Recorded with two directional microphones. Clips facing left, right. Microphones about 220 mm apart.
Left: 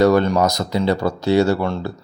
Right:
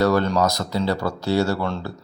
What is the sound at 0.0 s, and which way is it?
Speech, 15° left (ahead or behind).